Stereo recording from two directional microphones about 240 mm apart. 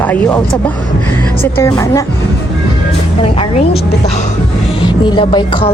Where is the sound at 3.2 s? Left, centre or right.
Left.